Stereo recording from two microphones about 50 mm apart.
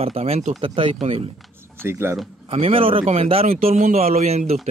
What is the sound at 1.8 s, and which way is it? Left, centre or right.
Speech, right.